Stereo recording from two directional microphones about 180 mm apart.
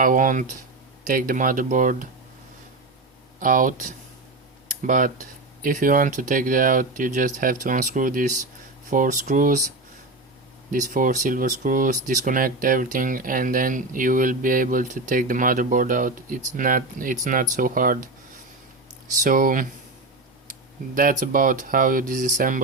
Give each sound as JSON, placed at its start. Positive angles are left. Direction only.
{"t": 0.0, "sound": "speech", "side_deg": -45}
{"t": 3.4, "sound": "speech", "side_deg": -50}
{"t": 10.7, "sound": "speech", "side_deg": -45}
{"t": 19.1, "sound": "speech", "side_deg": -50}